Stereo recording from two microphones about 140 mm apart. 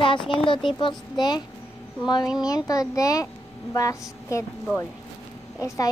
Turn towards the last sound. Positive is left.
turn(degrees=25)  # may be behind; listen again after turning